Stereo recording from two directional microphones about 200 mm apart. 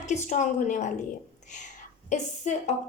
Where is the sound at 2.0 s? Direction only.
35° left (ahead or behind).